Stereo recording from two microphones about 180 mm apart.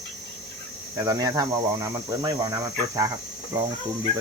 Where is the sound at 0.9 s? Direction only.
20° right (ahead or behind).